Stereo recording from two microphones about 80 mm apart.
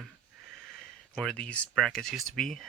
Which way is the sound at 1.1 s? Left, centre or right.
Centre.